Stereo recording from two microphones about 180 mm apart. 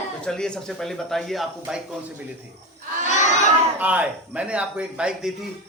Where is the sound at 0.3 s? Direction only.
5° left (ahead or behind).